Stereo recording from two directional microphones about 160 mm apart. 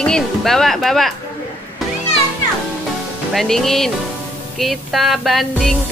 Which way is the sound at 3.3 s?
Centre (ahead or behind).